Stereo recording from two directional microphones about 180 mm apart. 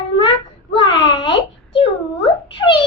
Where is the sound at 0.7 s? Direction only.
25° left (ahead or behind).